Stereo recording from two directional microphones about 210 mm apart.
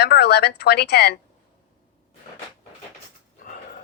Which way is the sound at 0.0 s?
50° left (ahead or behind).